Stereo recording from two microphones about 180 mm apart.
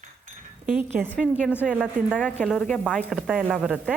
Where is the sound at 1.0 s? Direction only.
10° right (ahead or behind).